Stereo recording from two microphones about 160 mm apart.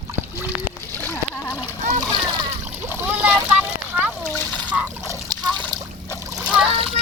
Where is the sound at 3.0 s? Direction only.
10° right (ahead or behind).